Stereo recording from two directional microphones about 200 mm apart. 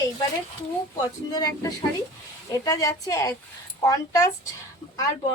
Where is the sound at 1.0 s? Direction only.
20° left (ahead or behind).